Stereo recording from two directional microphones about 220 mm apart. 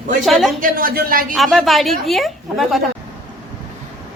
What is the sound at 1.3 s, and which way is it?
A woman's voice, centre (ahead or behind).